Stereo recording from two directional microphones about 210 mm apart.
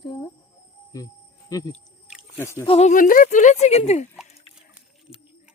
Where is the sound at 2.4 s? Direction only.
10° left (ahead or behind).